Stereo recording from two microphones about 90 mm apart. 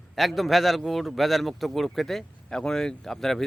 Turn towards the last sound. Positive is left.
turn(degrees=5)  # may be behind; listen again after turning